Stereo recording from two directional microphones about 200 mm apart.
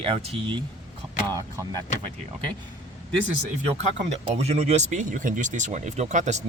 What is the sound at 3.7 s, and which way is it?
Speech, 35° right (ahead or behind).